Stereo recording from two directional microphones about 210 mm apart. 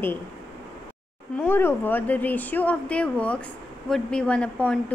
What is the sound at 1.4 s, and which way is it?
A woman's voice, 10° left (ahead or behind).